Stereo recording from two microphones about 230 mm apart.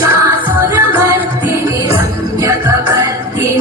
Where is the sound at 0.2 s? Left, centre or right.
Centre.